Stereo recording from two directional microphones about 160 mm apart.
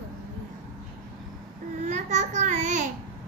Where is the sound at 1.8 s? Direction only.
45° right (ahead or behind).